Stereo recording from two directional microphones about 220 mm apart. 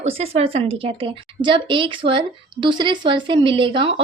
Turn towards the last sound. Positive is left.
turn(degrees=-25)  # may be behind; listen again after turning